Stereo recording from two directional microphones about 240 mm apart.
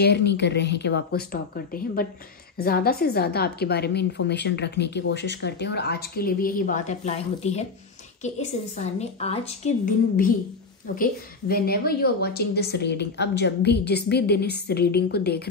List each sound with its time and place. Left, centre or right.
0.0 s a woman's voice: left